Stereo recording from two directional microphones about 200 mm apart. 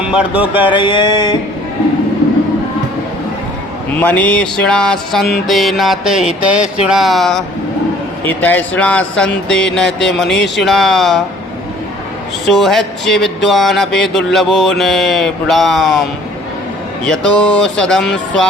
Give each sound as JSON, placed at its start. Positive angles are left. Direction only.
{"t": 0.0, "sound": "speech", "side_deg": -5}
{"t": 0.7, "sound": "a sound", "side_deg": 25}
{"t": 3.9, "sound": "speech", "side_deg": 10}
{"t": 12.5, "sound": "speech", "side_deg": 0}
{"t": 17.1, "sound": "speech", "side_deg": 5}